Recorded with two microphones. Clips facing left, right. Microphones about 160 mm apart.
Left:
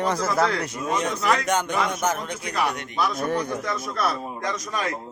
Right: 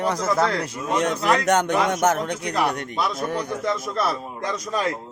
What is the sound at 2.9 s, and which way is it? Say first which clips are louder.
Speech: even; 25° right (ahead or behind).